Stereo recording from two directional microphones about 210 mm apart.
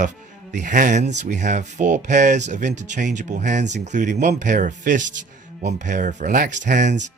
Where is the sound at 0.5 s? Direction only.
35° right (ahead or behind).